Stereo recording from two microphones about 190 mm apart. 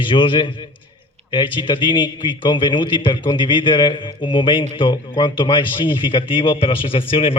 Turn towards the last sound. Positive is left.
turn(degrees=30)  # may be behind; listen again after turning